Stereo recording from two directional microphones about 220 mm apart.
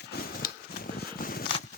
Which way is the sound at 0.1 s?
40° left (ahead or behind).